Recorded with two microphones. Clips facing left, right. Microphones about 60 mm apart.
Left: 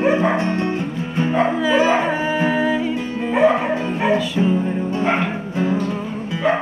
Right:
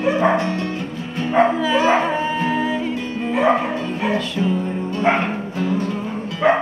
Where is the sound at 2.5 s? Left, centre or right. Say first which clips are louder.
Left 2 dB; centre.